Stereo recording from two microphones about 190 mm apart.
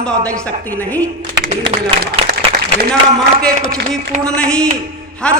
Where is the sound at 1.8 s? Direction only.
55° right (ahead or behind).